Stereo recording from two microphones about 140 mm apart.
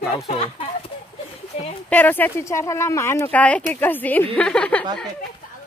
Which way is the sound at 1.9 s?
10° left (ahead or behind).